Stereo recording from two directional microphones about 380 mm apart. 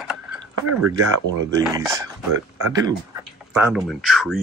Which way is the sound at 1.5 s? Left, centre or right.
Centre.